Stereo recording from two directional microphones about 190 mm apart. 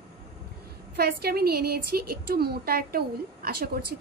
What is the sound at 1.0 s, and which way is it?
A woman's voice, 55° right (ahead or behind).